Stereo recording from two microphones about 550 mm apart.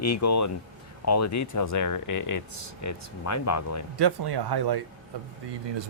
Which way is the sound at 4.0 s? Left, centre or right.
Right.